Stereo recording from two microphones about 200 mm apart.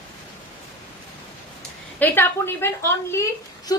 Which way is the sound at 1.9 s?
10° left (ahead or behind).